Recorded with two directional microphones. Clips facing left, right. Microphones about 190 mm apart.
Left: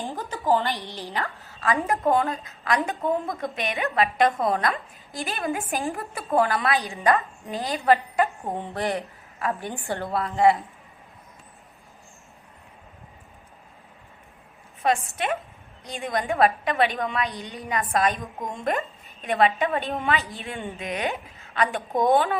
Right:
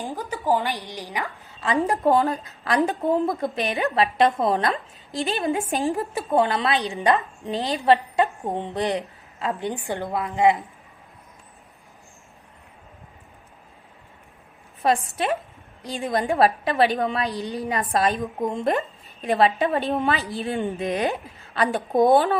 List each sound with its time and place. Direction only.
0.0 s a woman's voice: 10° right (ahead or behind)
14.8 s a woman's voice: 35° right (ahead or behind)